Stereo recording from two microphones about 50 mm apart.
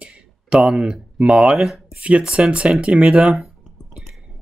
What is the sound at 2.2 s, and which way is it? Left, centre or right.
Speech, centre.